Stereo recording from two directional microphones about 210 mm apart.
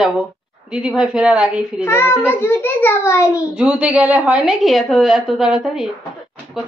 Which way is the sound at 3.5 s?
5° right (ahead or behind).